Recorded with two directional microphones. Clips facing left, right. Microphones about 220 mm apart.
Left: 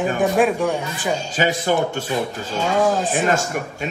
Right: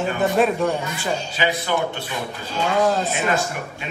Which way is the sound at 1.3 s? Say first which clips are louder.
Left 4 dB; 45° left (ahead or behind).